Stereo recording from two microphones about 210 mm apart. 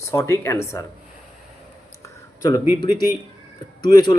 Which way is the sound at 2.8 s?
20° left (ahead or behind).